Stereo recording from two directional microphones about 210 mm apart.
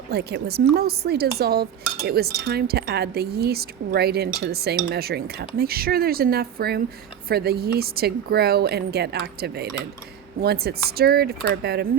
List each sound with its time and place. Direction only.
0.1 s speech: 50° right (ahead or behind)